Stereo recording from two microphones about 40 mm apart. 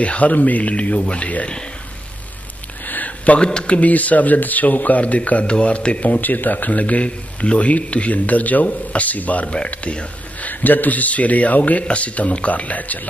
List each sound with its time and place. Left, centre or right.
0.0 s a man's voice: left
2.8 s a sound: left
3.3 s a man's voice: left
6.2 s a man's voice: left
10.5 s a man's voice: left